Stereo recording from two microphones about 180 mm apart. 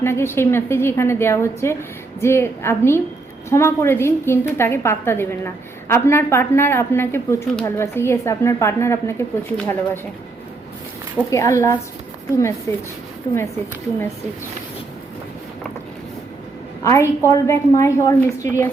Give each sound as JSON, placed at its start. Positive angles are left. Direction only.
{"t": 0.0, "sound": "speech", "side_deg": 15}
{"t": 11.3, "sound": "speech", "side_deg": 15}
{"t": 16.8, "sound": "speech", "side_deg": 15}